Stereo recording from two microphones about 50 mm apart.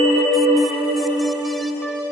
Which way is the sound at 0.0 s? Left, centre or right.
Centre.